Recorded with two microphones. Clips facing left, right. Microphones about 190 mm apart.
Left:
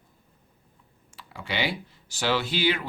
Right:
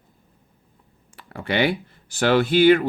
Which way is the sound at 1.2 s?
55° right (ahead or behind).